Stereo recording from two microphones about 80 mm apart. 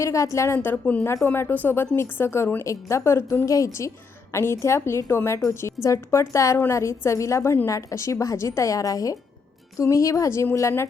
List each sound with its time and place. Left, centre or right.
0.0 s a woman's voice: left
7.7 s a woman's voice: left